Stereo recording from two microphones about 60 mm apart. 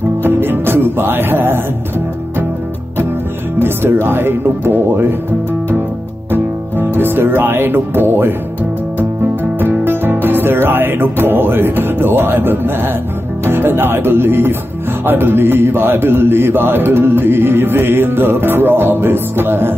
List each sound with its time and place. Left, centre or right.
0.2 s music: right
3.6 s a man's voice: right
6.3 s music: right
9.6 s music: right
13.5 s a man's voice: right